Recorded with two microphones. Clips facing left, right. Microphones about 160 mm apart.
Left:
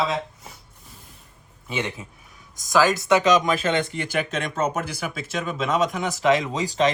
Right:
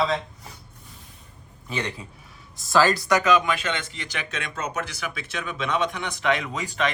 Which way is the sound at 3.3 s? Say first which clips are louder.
Left 3 dB; 40° left (ahead or behind).